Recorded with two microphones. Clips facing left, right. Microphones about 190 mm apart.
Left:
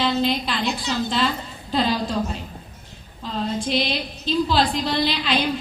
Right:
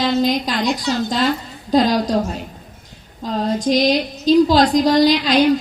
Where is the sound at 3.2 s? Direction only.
40° right (ahead or behind).